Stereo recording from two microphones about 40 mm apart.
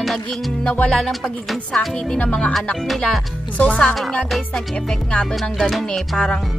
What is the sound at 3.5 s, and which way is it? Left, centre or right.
Speech, left.